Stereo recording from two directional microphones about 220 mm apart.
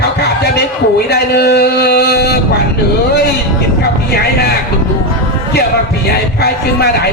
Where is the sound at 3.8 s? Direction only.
45° left (ahead or behind).